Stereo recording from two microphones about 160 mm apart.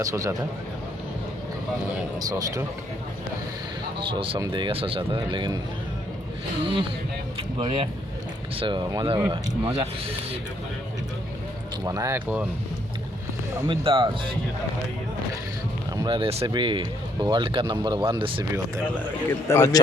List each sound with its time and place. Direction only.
0.0 s speech: 20° right (ahead or behind)
2.1 s speech: 20° right (ahead or behind)
4.0 s speech: 35° right (ahead or behind)
7.3 s speech: 30° right (ahead or behind)
9.3 s speech: 35° right (ahead or behind)
11.9 s speech: 20° right (ahead or behind)
13.7 s speech: 30° right (ahead or behind)
16.0 s speech: 30° right (ahead or behind)
19.3 s a man's voice: 15° left (ahead or behind)